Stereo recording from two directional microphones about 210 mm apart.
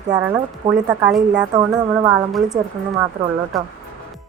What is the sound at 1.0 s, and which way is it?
Speech, 5° right (ahead or behind).